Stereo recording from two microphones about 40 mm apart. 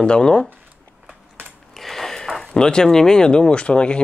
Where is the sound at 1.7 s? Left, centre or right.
Centre; by 4.0 s left.